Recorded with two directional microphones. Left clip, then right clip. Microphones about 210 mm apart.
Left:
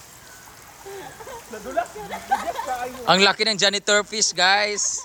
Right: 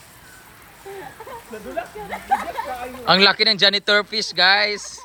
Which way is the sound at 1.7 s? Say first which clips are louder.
Left 3 dB; centre (ahead or behind).